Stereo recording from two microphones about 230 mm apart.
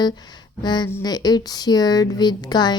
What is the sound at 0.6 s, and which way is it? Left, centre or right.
A woman's voice, centre.